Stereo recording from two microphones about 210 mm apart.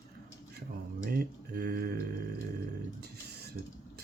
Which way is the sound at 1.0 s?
45° right (ahead or behind).